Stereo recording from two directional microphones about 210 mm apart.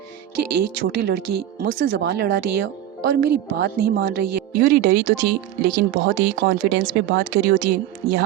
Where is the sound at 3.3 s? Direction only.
50° right (ahead or behind).